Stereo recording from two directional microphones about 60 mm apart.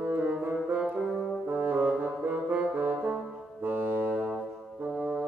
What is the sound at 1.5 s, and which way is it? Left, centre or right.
Brass instrument, right.